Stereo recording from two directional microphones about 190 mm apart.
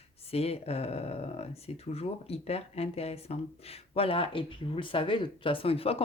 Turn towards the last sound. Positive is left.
turn(degrees=30)  # may be behind; listen again after turning